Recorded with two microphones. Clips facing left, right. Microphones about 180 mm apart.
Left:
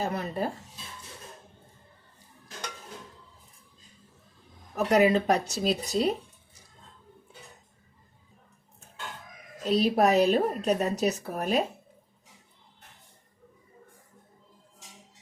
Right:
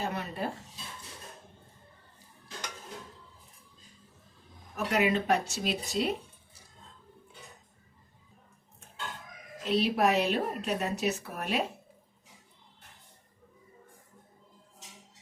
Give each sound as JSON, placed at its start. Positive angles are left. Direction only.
{"t": 0.0, "sound": "a sound", "side_deg": 40}
{"t": 4.9, "sound": "speech", "side_deg": 40}
{"t": 9.6, "sound": "speech", "side_deg": 40}